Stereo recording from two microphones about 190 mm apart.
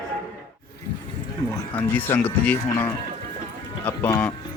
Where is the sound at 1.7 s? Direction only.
10° left (ahead or behind).